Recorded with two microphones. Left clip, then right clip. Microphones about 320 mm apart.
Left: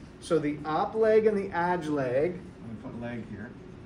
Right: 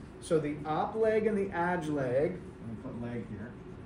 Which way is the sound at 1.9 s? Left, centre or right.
Left.